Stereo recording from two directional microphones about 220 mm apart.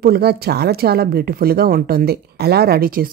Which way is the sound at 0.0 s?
45° right (ahead or behind).